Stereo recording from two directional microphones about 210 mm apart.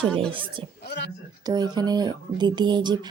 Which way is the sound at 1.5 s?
20° right (ahead or behind).